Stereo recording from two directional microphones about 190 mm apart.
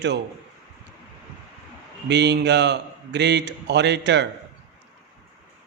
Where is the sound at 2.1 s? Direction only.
65° right (ahead or behind).